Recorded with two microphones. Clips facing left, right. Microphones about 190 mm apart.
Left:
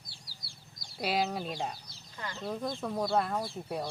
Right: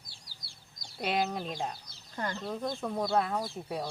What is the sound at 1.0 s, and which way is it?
Speech, 5° left (ahead or behind).